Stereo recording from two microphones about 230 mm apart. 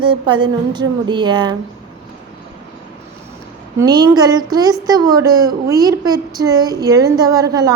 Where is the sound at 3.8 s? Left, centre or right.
Centre.